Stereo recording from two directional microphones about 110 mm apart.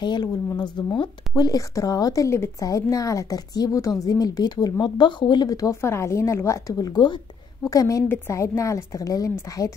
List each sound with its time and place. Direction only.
0.0 s speech: 40° left (ahead or behind)
1.3 s a woman's voice: 35° left (ahead or behind)